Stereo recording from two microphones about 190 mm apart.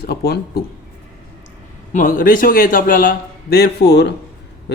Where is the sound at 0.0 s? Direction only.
55° left (ahead or behind).